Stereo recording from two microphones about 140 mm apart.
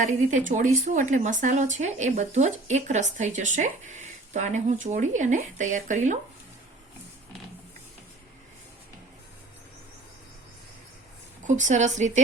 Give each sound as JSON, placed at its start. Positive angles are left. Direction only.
{"t": 0.0, "sound": "a woman's voice", "side_deg": -60}
{"t": 11.4, "sound": "a woman's voice", "side_deg": -60}